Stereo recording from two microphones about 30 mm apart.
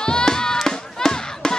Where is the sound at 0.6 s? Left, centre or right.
Centre.